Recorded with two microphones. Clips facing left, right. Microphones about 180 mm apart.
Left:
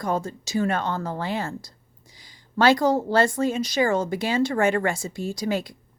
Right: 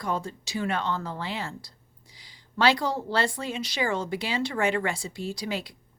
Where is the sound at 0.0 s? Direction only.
45° left (ahead or behind).